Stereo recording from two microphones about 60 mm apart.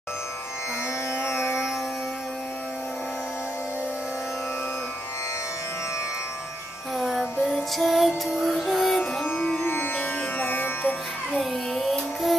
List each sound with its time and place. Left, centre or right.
1.1 s music: left
7.0 s music: centre
9.6 s music: left
11.3 s music: centre